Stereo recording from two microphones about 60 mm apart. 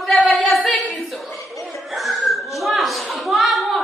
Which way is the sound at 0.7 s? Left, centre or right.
Centre.